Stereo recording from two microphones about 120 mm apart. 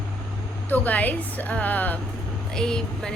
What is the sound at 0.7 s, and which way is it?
A woman's voice, 15° left (ahead or behind).